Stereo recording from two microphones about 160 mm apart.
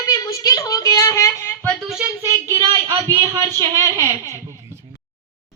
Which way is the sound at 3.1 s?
25° right (ahead or behind).